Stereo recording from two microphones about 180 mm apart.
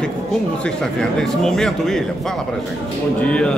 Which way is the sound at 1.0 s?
Centre (ahead or behind).